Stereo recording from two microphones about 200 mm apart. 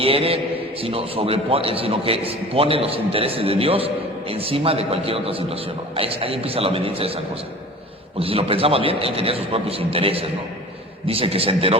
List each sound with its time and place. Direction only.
0.0 s a man's voice: 30° right (ahead or behind)
8.2 s a man's voice: 30° right (ahead or behind)